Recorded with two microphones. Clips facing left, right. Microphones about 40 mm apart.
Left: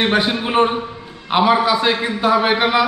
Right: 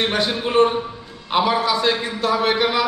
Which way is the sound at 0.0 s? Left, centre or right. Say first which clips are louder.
Left 3 dB; centre.